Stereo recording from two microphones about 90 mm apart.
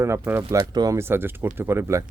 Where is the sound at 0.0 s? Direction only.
30° right (ahead or behind).